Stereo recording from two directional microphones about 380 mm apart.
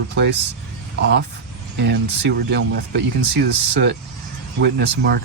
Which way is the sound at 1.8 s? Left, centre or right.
Right.